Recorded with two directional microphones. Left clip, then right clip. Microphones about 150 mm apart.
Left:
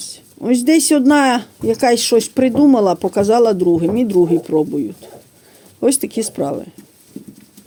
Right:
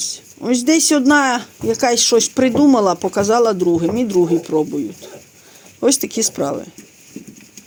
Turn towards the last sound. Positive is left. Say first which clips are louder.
# right 1 dB
turn(degrees=35)  # may be behind; listen again after turning